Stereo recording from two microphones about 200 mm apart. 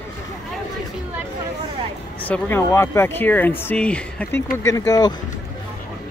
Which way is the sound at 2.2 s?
10° left (ahead or behind).